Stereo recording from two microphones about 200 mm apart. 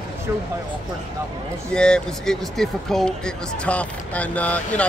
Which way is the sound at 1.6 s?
5° left (ahead or behind).